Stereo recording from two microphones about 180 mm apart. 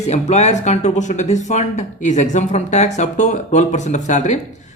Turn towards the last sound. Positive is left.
turn(degrees=40)  # may be behind; listen again after turning